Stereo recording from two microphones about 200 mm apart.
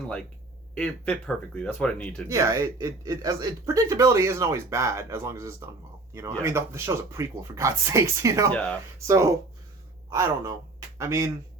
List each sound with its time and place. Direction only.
0.8 s speech: 5° left (ahead or behind)
2.2 s a man's voice: 15° right (ahead or behind)